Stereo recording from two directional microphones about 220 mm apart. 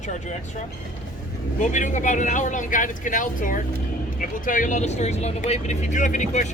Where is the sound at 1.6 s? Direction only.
35° left (ahead or behind).